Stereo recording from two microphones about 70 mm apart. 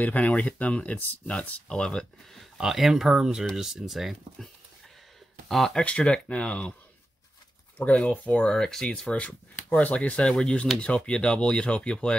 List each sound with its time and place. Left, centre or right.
0.0 s speech: left
2.5 s speech: centre
5.5 s speech: centre
5.9 s speech: centre
7.7 s speech: centre